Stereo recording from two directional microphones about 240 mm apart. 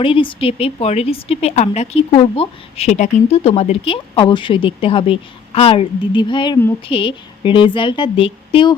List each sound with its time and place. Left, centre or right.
0.0 s a woman's voice: left